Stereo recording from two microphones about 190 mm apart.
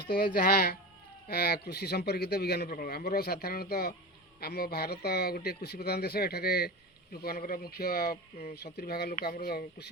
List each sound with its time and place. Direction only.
0.1 s speech: 45° left (ahead or behind)